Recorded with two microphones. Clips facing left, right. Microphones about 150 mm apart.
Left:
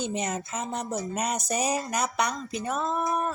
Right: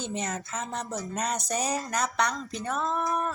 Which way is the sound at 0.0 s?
15° left (ahead or behind).